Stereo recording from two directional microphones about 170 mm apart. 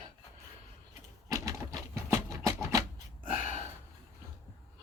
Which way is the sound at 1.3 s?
20° right (ahead or behind).